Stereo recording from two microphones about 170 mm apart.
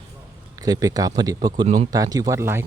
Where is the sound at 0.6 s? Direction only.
20° right (ahead or behind).